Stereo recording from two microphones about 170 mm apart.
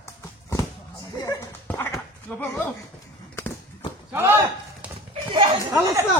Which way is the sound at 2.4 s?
15° left (ahead or behind).